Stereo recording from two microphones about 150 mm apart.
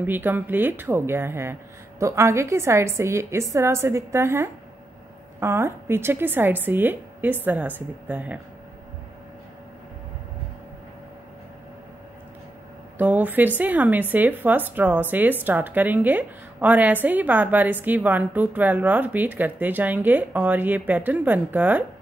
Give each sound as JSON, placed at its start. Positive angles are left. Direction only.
{"t": 0.0, "sound": "a woman's voice", "side_deg": -15}
{"t": 12.9, "sound": "a woman's voice", "side_deg": -10}